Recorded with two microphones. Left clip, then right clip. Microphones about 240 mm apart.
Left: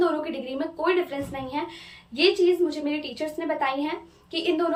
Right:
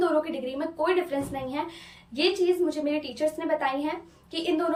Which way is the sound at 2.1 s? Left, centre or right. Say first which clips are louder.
Left 3 dB; centre.